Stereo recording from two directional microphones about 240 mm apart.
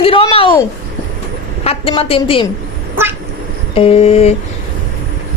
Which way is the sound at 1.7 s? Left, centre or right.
Left.